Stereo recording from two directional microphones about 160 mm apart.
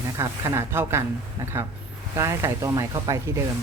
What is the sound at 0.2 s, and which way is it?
Speech, 15° right (ahead or behind).